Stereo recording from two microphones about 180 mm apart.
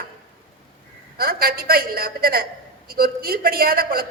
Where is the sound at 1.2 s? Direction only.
55° right (ahead or behind).